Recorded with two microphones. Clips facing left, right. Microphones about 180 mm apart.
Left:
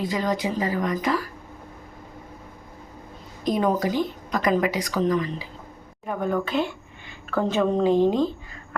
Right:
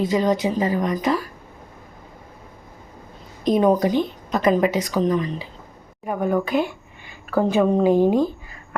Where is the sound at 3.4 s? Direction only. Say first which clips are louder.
Right 5 dB; 20° right (ahead or behind).